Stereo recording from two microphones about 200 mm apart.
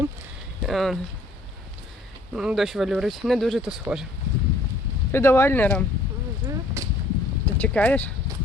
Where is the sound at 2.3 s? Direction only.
5° right (ahead or behind).